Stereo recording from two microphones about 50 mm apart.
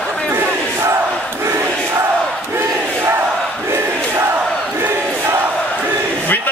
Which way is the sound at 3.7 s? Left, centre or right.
Right.